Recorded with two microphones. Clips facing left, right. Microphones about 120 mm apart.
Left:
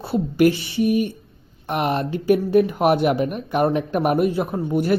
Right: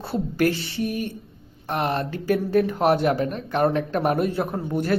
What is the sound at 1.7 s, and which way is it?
Speech, 15° left (ahead or behind).